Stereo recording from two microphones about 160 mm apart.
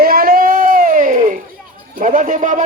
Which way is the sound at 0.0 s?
65° right (ahead or behind).